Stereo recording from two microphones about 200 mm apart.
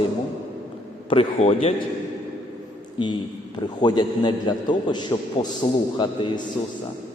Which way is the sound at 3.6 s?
20° left (ahead or behind).